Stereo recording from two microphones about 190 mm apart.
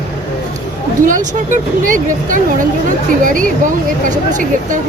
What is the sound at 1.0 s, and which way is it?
Speech, 40° right (ahead or behind).